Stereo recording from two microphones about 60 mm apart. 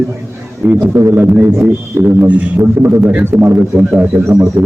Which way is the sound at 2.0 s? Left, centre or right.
Right.